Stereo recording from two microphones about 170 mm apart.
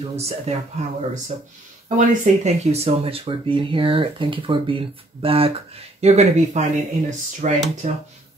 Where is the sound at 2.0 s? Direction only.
40° right (ahead or behind).